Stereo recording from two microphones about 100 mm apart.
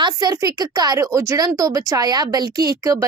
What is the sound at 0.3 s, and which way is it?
A woman's voice, 40° right (ahead or behind).